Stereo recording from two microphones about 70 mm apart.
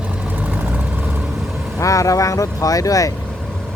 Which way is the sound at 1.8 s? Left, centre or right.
Left.